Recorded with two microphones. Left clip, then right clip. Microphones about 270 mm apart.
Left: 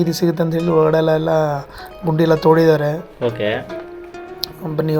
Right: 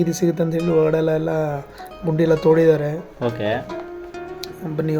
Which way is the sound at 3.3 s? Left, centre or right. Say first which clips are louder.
Left 1 dB; right.